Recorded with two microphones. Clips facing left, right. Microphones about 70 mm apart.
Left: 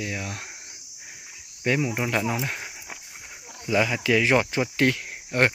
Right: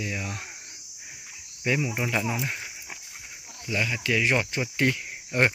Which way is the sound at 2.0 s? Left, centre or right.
Left.